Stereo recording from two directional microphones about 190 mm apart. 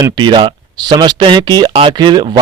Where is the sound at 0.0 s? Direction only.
25° right (ahead or behind).